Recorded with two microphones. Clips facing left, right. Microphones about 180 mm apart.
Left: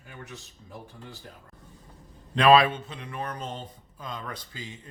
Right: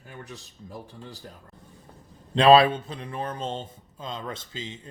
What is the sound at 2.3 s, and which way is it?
Speech, 30° right (ahead or behind).